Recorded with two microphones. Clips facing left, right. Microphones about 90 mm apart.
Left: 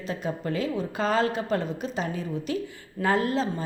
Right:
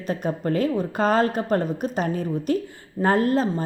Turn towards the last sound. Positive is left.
turn(degrees=-45)  # may be behind; listen again after turning